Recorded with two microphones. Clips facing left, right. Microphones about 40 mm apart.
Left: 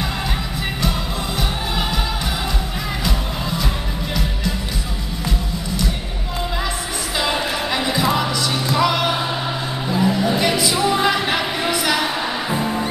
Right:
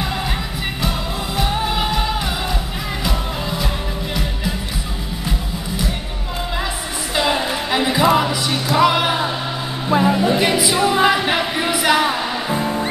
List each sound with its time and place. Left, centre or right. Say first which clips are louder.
1.4 s music: right 6 dB; centre
3.1 s music: right 1 dB; centre
7.2 s music: right 2 dB; centre
9.8 s music: right 4 dB; right
10.1 s a sound: right 2 dB; centre
12.4 s music: right 2 dB; centre